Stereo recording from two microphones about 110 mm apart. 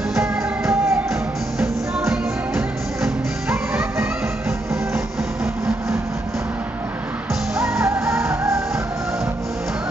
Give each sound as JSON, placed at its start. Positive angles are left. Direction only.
{"t": 0.2, "sound": "music", "side_deg": -25}
{"t": 1.6, "sound": "music", "side_deg": -5}
{"t": 4.0, "sound": "music", "side_deg": -25}
{"t": 7.8, "sound": "music", "side_deg": -25}